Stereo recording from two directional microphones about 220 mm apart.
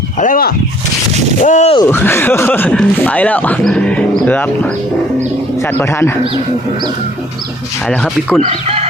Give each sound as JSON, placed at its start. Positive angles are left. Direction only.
{"t": 0.2, "sound": "speech", "side_deg": 40}
{"t": 1.8, "sound": "speech", "side_deg": 10}
{"t": 7.9, "sound": "speech", "side_deg": 5}
{"t": 8.4, "sound": "speech", "side_deg": -25}